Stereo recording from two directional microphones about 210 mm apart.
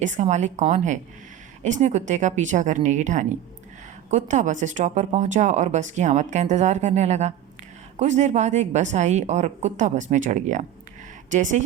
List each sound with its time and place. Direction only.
0.0 s speech: 35° right (ahead or behind)